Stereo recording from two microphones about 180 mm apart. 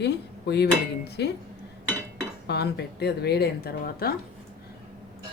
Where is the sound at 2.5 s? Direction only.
65° left (ahead or behind).